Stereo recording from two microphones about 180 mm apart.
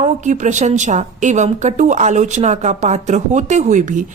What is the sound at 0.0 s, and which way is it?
A woman's voice, 40° right (ahead or behind).